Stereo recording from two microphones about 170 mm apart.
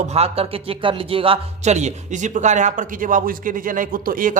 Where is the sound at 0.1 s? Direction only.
35° right (ahead or behind).